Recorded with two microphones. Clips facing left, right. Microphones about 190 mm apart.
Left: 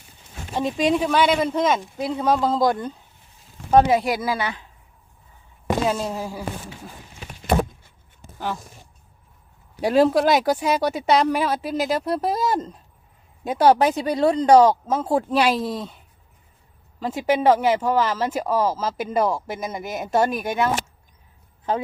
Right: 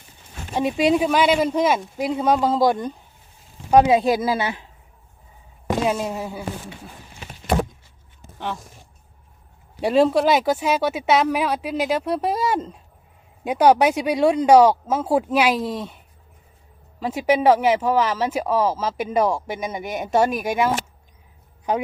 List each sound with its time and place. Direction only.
0.5 s speech: 10° right (ahead or behind)
5.9 s speech: 10° right (ahead or behind)
9.8 s speech: centre (ahead or behind)
17.0 s speech: 5° right (ahead or behind)